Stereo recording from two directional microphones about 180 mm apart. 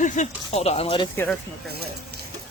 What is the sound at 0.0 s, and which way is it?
Speech, 40° left (ahead or behind).